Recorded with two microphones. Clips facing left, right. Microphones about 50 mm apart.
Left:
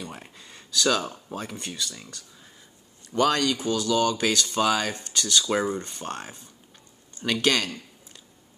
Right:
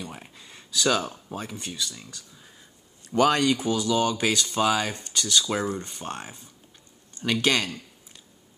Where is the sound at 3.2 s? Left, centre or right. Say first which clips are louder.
Right 1 dB; centre.